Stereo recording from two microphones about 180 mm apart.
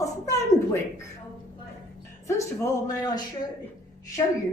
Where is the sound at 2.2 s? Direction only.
15° left (ahead or behind).